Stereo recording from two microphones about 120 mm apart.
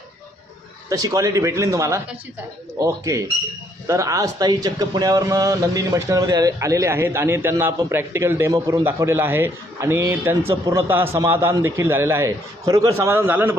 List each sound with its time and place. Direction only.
0.9 s a man's voice: 30° right (ahead or behind)